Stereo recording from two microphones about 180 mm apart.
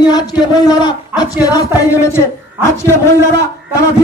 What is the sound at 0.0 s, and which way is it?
Speech, 25° left (ahead or behind).